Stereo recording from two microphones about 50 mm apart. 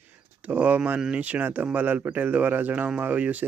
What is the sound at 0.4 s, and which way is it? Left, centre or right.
Speech, right.